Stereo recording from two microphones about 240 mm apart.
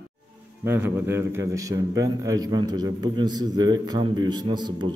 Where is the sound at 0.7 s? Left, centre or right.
Centre.